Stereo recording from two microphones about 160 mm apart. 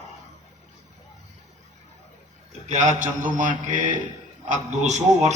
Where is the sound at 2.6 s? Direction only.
45° right (ahead or behind).